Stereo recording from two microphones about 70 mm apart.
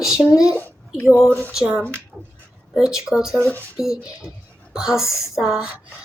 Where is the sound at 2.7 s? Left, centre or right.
Centre.